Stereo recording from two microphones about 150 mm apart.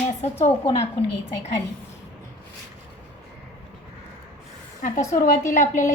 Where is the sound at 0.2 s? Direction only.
45° left (ahead or behind).